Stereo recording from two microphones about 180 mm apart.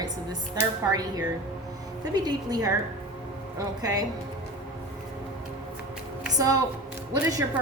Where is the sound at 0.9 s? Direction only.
20° right (ahead or behind).